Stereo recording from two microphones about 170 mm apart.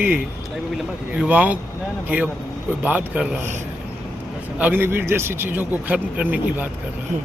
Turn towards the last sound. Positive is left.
turn(degrees=-10)  # may be behind; listen again after turning